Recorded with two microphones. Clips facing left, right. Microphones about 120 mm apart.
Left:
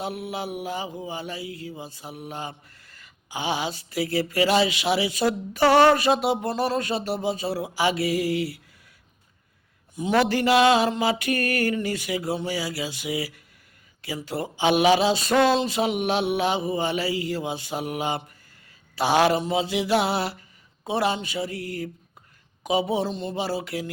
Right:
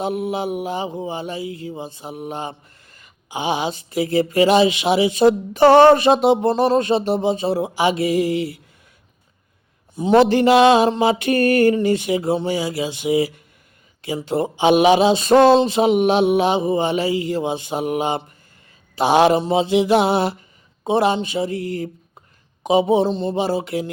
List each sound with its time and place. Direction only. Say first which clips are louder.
0.0 s mantra: right 8 dB; 25° right (ahead or behind)
9.9 s mantra: right 8 dB; 30° right (ahead or behind)